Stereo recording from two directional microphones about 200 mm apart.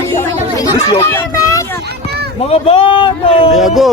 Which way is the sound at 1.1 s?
15° left (ahead or behind).